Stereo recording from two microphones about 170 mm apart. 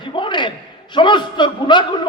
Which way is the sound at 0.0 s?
30° left (ahead or behind).